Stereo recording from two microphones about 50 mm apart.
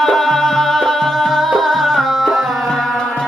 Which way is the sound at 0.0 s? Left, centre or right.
Centre.